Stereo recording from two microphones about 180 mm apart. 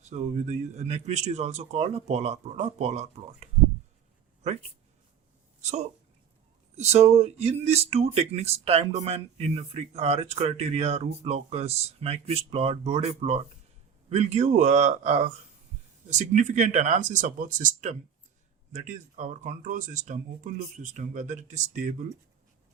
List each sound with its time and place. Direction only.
0.0 s speech: 40° right (ahead or behind)
6.7 s speech: 35° right (ahead or behind)